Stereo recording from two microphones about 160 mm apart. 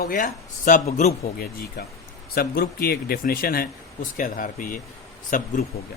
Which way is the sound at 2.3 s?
70° left (ahead or behind).